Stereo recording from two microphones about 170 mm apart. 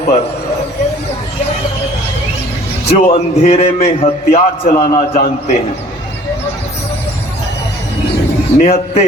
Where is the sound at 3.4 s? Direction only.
40° left (ahead or behind).